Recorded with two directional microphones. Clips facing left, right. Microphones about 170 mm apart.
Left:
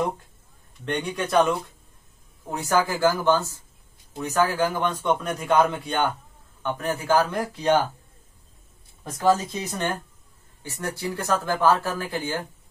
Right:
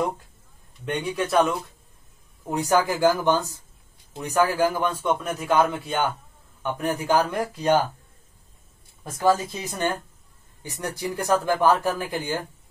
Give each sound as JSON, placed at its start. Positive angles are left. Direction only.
{"t": 0.8, "sound": "a man's voice", "side_deg": -5}
{"t": 2.5, "sound": "a man's voice", "side_deg": -15}
{"t": 9.5, "sound": "speech", "side_deg": -10}